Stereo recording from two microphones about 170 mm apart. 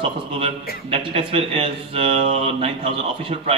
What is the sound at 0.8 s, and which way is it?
A man's voice, 35° right (ahead or behind).